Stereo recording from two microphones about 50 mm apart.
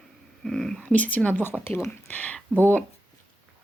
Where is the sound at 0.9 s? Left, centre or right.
Left.